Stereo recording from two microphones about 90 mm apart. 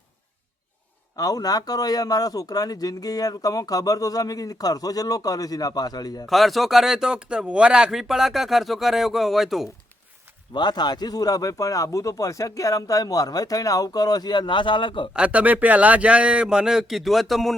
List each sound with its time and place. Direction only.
1.1 s a man's voice: 45° left (ahead or behind)
6.2 s speech: centre (ahead or behind)
10.5 s a man's voice: 55° left (ahead or behind)
15.1 s speech: 15° right (ahead or behind)